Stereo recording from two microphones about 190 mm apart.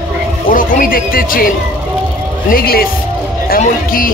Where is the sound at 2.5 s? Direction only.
50° left (ahead or behind).